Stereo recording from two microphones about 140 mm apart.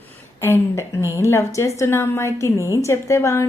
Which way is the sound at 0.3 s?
20° left (ahead or behind).